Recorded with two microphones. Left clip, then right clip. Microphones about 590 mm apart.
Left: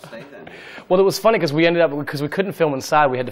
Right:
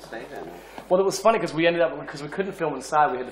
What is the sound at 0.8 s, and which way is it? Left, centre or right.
Speech, left.